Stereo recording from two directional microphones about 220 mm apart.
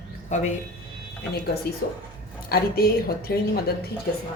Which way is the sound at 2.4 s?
45° left (ahead or behind).